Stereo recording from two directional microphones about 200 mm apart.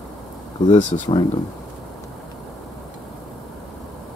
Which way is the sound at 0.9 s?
30° left (ahead or behind).